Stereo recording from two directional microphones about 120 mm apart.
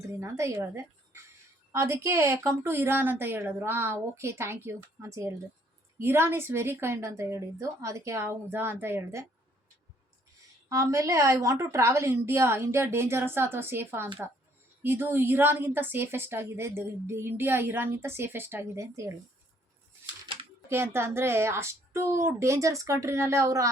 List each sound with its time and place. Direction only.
0.2 s a woman's voice: 25° right (ahead or behind)
10.7 s a woman's voice: 25° right (ahead or behind)
20.7 s a woman's voice: 20° right (ahead or behind)